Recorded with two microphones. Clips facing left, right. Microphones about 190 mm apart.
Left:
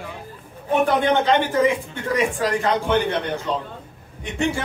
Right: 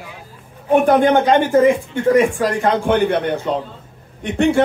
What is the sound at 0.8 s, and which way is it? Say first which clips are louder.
A man's voice: right 5 dB; 45° right (ahead or behind).